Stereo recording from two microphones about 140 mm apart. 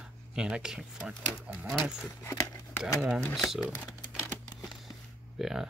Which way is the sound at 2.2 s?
15° left (ahead or behind).